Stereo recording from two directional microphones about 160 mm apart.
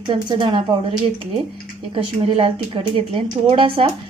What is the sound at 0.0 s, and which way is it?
Speech, 30° right (ahead or behind).